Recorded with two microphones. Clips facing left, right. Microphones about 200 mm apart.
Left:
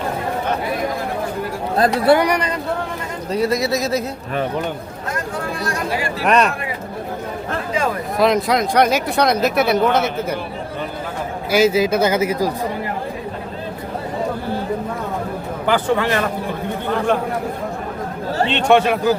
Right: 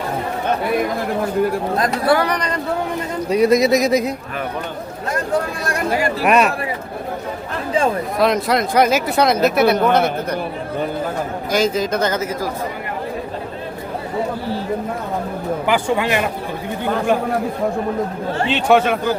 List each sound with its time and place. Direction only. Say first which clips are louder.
1.8 s speech: left 4 dB; 25° left (ahead or behind)
2.2 s speech: left 2 dB; 10° left (ahead or behind)
3.2 s speech: right 5 dB; 15° right (ahead or behind)
6.2 s speech: even; 5° right (ahead or behind)
8.2 s speech: left 1 dB; centre (ahead or behind)
11.5 s speech: left 3 dB; 5° left (ahead or behind)
15.6 s speech: left 2 dB; 15° right (ahead or behind)
18.5 s speech: even; centre (ahead or behind)